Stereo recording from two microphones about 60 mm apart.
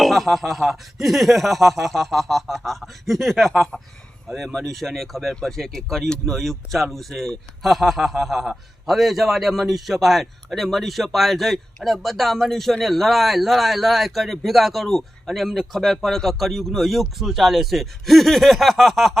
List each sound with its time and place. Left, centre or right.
0.0 s speech: centre